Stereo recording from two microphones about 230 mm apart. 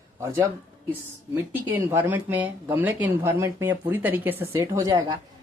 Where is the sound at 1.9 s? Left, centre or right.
Centre.